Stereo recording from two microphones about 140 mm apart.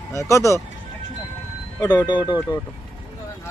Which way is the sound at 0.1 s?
20° left (ahead or behind).